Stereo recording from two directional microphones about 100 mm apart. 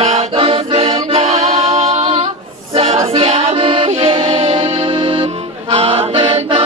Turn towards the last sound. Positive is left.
turn(degrees=-55)  # may be behind; listen again after turning